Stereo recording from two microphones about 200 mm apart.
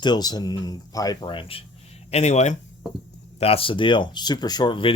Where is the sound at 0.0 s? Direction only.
20° left (ahead or behind).